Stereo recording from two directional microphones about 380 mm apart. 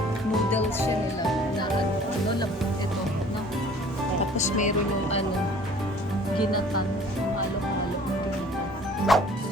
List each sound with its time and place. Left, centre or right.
4.4 s speech: centre
9.1 s music: centre